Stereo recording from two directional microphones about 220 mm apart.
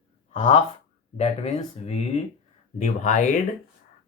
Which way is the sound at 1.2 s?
30° left (ahead or behind).